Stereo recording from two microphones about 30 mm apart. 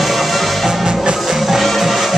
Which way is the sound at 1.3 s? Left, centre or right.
Centre.